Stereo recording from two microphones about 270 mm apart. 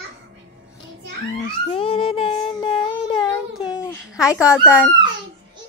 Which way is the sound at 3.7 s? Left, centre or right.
Centre.